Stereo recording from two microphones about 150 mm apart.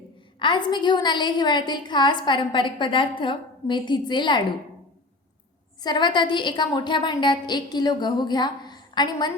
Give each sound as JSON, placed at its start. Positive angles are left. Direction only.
{"t": 0.3, "sound": "a woman's voice", "side_deg": 30}
{"t": 5.8, "sound": "a woman's voice", "side_deg": 30}